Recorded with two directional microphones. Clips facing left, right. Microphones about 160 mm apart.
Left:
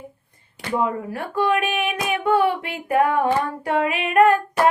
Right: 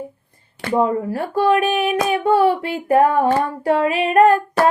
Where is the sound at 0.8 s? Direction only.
35° right (ahead or behind).